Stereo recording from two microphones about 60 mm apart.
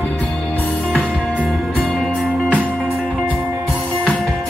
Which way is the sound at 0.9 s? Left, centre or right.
Centre.